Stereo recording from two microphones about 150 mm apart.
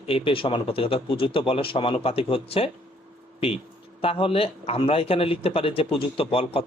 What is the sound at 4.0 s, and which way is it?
A man's voice, 40° left (ahead or behind).